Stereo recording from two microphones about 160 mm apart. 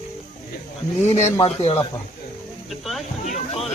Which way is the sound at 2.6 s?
Centre (ahead or behind).